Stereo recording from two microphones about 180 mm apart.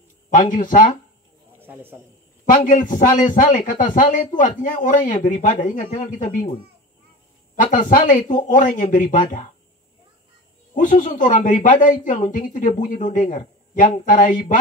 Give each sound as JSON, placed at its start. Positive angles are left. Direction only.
{"t": 0.3, "sound": "speech", "side_deg": 45}
{"t": 1.6, "sound": "a man's voice", "side_deg": -10}
{"t": 2.6, "sound": "speech", "side_deg": 45}
{"t": 7.7, "sound": "speech", "side_deg": 45}
{"t": 10.7, "sound": "speech", "side_deg": 45}